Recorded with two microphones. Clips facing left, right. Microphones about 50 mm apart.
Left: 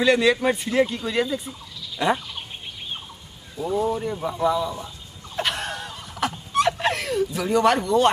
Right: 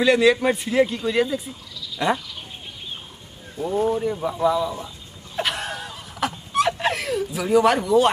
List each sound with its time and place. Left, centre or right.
0.0 s speech: centre
3.8 s speech: centre
5.4 s a sound: centre